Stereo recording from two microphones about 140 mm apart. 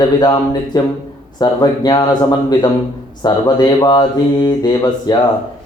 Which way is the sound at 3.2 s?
30° left (ahead or behind).